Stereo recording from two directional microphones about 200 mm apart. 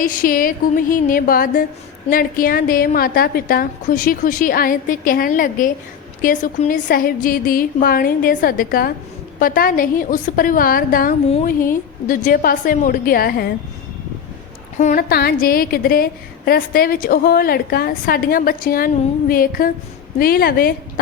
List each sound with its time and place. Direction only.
0.0 s a woman's voice: 45° left (ahead or behind)
14.8 s a woman's voice: 35° left (ahead or behind)
15.1 s a woman's voice: 50° left (ahead or behind)